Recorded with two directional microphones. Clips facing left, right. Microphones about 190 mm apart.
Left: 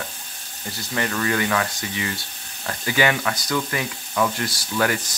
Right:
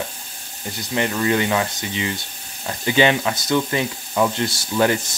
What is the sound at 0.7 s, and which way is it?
Speech, 20° right (ahead or behind).